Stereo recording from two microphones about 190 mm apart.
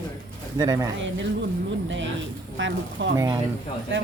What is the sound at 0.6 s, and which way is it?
Speech, 20° right (ahead or behind).